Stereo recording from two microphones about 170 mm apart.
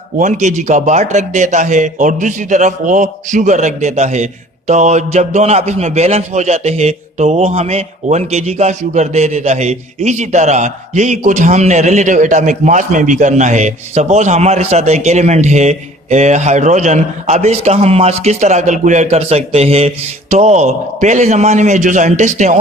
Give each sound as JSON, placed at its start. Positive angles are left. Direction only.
{"t": 0.2, "sound": "a man's voice", "side_deg": -45}